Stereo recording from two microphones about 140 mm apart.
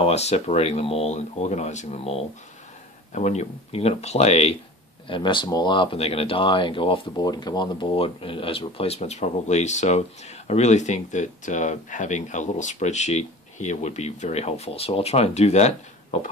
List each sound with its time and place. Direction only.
0.0 s speech: 50° left (ahead or behind)
3.1 s speech: 55° left (ahead or behind)
5.0 s speech: 35° left (ahead or behind); by 16.3 s 50° left (ahead or behind)